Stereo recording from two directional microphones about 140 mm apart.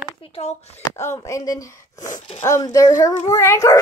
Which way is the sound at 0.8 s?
20° left (ahead or behind).